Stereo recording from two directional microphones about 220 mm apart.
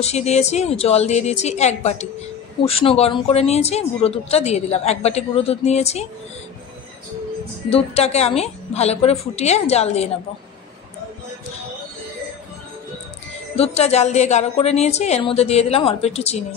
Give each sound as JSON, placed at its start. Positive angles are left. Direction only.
{"t": 0.0, "sound": "speech", "side_deg": 30}
{"t": 7.7, "sound": "speech", "side_deg": 30}
{"t": 13.6, "sound": "speech", "side_deg": 30}